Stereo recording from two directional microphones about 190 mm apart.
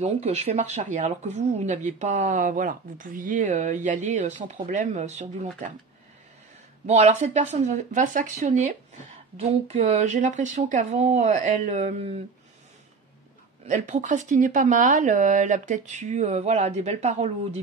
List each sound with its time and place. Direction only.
0.0 s speech: 35° right (ahead or behind)
6.9 s speech: 35° right (ahead or behind)
13.7 s speech: 40° right (ahead or behind)